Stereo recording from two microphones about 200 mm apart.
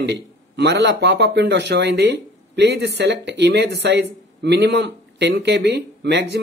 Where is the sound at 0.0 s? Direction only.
55° right (ahead or behind).